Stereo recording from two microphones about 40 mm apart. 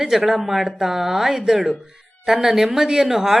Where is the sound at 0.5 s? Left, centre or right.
Right.